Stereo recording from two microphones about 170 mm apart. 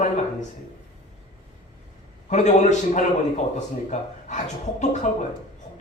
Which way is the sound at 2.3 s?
45° left (ahead or behind).